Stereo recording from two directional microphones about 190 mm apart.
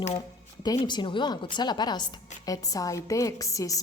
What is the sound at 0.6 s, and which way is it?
A woman's voice, 20° left (ahead or behind).